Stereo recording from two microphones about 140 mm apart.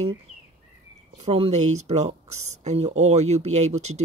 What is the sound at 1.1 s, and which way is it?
Speech, 50° right (ahead or behind).